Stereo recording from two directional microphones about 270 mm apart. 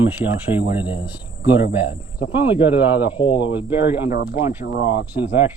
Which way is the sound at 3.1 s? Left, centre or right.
Centre.